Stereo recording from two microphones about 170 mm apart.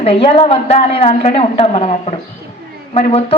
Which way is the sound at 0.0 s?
30° left (ahead or behind).